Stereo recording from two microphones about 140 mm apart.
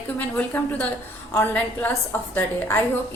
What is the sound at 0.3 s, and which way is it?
A woman's voice, 10° left (ahead or behind).